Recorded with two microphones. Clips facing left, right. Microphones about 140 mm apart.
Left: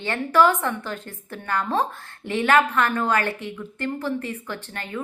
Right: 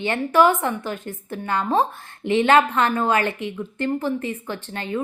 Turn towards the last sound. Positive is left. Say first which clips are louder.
# right 4 dB
turn(degrees=-20)  # may be behind; listen again after turning